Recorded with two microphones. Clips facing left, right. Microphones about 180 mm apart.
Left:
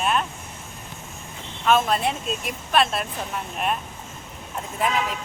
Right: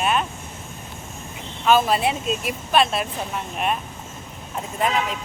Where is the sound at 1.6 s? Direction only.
5° right (ahead or behind).